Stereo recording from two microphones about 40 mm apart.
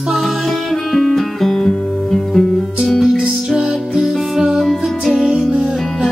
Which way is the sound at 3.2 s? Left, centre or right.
Right.